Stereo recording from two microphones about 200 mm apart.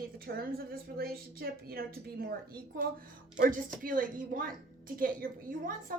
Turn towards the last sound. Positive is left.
turn(degrees=-45)  # may be behind; listen again after turning